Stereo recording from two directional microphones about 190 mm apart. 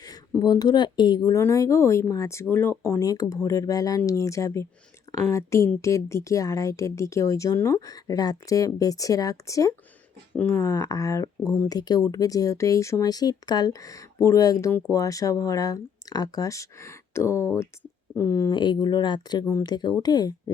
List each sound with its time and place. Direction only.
0.0 s speech: 20° left (ahead or behind)